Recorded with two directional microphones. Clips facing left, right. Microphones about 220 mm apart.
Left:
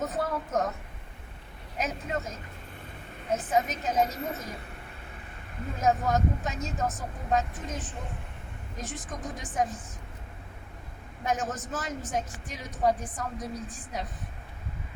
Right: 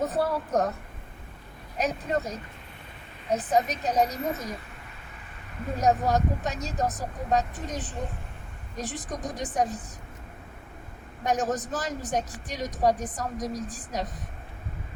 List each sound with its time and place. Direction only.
0.0 s a sound: 35° right (ahead or behind)
1.8 s speech: 35° right (ahead or behind)
5.7 s speech: 35° right (ahead or behind)
11.2 s speech: 35° right (ahead or behind)